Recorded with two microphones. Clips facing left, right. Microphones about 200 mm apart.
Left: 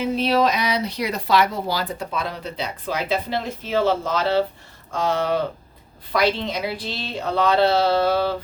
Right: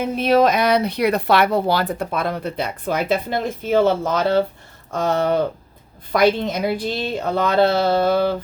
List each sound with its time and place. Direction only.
0.0 s speech: 50° right (ahead or behind)